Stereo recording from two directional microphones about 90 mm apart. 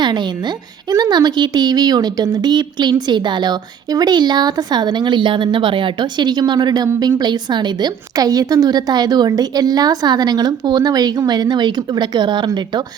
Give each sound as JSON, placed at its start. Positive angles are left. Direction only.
{"t": 0.0, "sound": "speech", "side_deg": -55}